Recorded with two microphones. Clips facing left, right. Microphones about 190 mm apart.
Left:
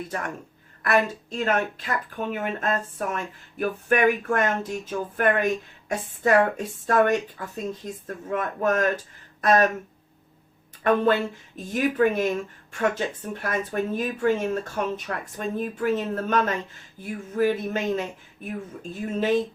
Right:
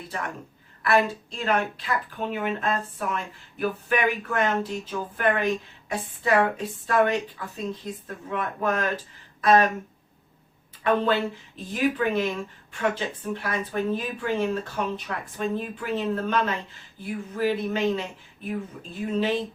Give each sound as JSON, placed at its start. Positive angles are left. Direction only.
{"t": 0.8, "sound": "speech", "side_deg": 45}
{"t": 10.8, "sound": "speech", "side_deg": 45}